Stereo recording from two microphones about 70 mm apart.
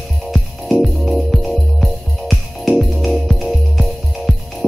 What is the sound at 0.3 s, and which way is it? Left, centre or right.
Music, centre.